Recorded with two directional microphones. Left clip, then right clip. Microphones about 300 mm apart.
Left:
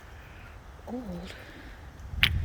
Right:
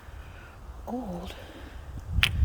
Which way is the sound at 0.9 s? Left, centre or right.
Centre.